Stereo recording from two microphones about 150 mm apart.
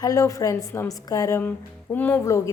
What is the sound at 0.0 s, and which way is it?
A woman's voice, 25° left (ahead or behind).